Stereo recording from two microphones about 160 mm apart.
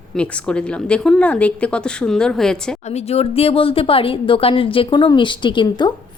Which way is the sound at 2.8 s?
45° left (ahead or behind).